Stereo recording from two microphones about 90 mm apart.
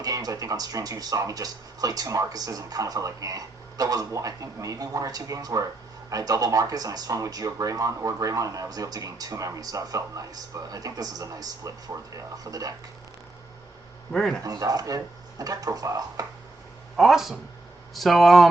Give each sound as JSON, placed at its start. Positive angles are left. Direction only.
{"t": 0.0, "sound": "speech", "side_deg": -45}
{"t": 14.1, "sound": "speech", "side_deg": 5}
{"t": 14.4, "sound": "speech", "side_deg": -40}
{"t": 17.0, "sound": "speech", "side_deg": -5}